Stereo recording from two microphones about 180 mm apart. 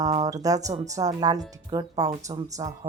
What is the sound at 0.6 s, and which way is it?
Speech, 40° right (ahead or behind).